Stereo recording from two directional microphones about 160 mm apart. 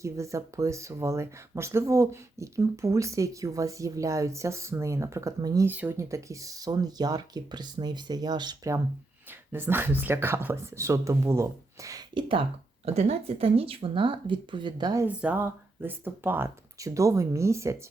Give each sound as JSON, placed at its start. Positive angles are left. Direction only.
{"t": 0.0, "sound": "speech", "side_deg": -20}
{"t": 5.6, "sound": "speech", "side_deg": -10}
{"t": 12.8, "sound": "speech", "side_deg": -40}
{"t": 15.0, "sound": "speech", "side_deg": -10}